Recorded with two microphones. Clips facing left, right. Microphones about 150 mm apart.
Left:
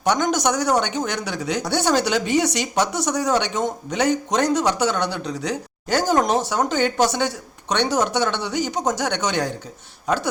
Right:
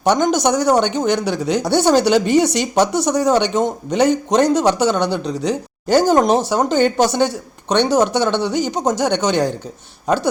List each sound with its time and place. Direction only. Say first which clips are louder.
0.0 s speech: right 5 dB; 30° right (ahead or behind)